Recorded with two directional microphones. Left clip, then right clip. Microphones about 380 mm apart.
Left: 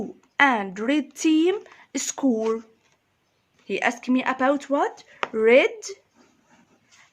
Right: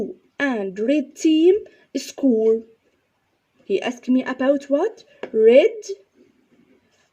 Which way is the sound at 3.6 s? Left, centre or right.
Centre.